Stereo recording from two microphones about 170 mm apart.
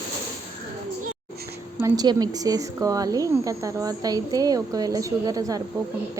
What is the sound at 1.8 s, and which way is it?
A woman's voice, 25° right (ahead or behind).